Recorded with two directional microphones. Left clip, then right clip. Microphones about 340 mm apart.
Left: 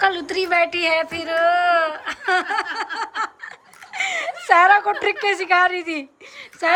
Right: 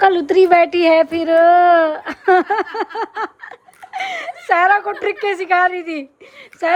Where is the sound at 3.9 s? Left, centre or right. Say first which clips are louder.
Even; centre.